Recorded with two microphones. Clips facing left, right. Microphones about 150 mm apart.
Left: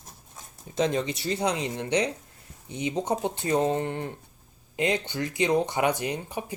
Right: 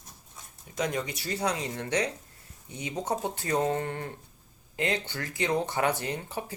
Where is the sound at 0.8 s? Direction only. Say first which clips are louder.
Left 5 dB; 25° left (ahead or behind).